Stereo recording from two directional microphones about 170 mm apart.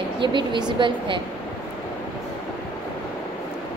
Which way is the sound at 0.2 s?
30° right (ahead or behind).